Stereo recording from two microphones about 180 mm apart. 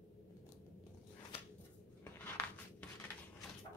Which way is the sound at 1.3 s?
30° left (ahead or behind).